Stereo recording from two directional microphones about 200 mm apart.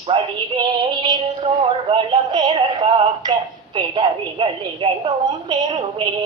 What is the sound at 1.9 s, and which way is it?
Speech, 25° right (ahead or behind).